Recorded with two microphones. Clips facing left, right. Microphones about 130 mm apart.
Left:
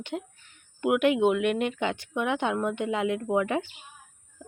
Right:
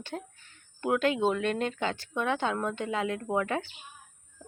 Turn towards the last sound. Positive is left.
turn(degrees=20)  # may be behind; listen again after turning